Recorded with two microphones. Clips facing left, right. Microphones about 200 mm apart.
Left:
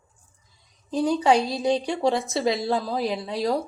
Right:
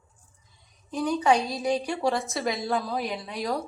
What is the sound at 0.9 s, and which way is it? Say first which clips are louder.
A woman's voice: left 3 dB; 30° left (ahead or behind).